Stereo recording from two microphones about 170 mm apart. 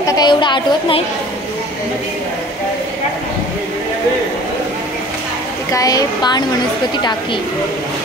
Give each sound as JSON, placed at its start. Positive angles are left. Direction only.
{"t": 0.0, "sound": "a woman's voice", "side_deg": 25}
{"t": 5.7, "sound": "a woman's voice", "side_deg": 20}